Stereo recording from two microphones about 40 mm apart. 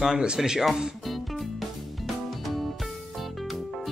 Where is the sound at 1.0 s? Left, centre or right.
Centre.